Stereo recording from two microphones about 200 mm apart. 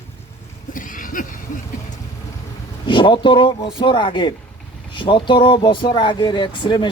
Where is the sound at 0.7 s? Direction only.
40° left (ahead or behind).